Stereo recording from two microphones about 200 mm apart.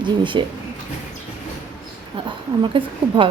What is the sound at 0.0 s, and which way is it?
Speech, 25° right (ahead or behind).